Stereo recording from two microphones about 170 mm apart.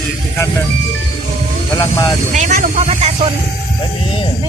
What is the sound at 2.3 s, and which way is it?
Speech, 45° right (ahead or behind).